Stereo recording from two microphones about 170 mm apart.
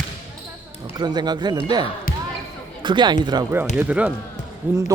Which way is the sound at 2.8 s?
25° right (ahead or behind).